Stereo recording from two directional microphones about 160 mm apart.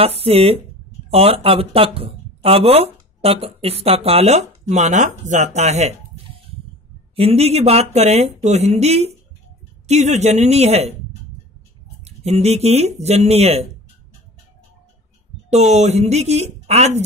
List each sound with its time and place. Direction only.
0.0 s speech: 40° right (ahead or behind)
12.0 s speech: 40° right (ahead or behind)
15.5 s speech: 45° right (ahead or behind)